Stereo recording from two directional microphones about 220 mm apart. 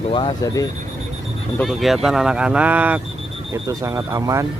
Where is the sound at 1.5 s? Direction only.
Centre (ahead or behind).